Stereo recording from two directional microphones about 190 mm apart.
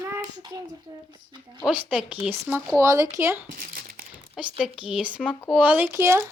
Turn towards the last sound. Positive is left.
turn(degrees=-15)  # may be behind; listen again after turning